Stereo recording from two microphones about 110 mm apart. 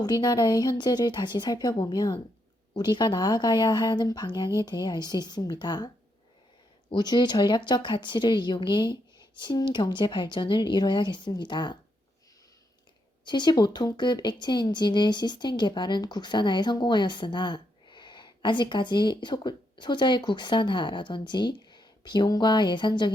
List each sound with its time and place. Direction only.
0.0 s speech: 35° left (ahead or behind)
6.9 s speech: 40° left (ahead or behind)
13.2 s speech: 45° left (ahead or behind)